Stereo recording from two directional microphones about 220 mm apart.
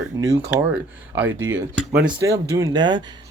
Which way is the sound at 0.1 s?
15° right (ahead or behind).